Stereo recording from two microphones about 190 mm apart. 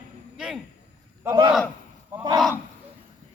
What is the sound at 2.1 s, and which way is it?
Speech, 20° right (ahead or behind).